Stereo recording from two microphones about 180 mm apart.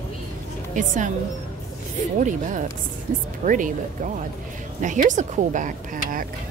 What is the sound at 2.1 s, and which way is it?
Speech, 45° right (ahead or behind).